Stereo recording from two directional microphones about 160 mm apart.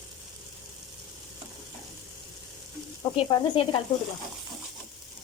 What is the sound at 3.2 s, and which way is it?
Sizzle, 30° left (ahead or behind).